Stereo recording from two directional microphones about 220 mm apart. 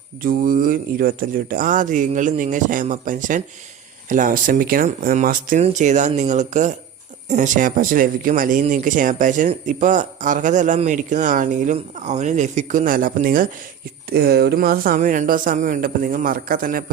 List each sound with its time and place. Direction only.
0.2 s speech: 40° right (ahead or behind)